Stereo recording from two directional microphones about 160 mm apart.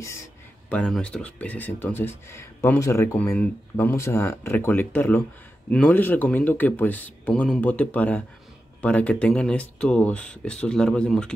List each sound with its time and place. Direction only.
0.7 s speech: 5° left (ahead or behind)